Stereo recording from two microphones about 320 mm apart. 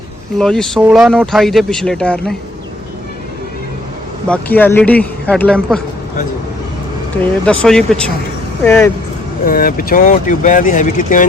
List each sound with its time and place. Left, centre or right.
0.3 s speech: centre
4.3 s speech: centre
7.4 s speech: centre
9.4 s speech: left